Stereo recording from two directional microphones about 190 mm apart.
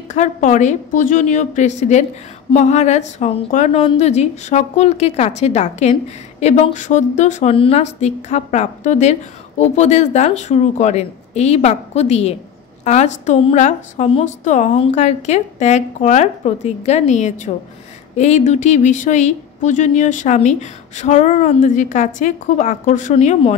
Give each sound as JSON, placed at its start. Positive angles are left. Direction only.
{"t": 0.1, "sound": "a woman's voice", "side_deg": 40}